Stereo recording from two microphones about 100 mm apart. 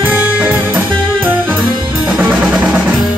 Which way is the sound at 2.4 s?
15° right (ahead or behind).